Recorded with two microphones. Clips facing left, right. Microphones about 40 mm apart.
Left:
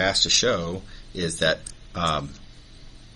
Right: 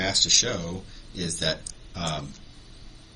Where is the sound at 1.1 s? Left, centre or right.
Left.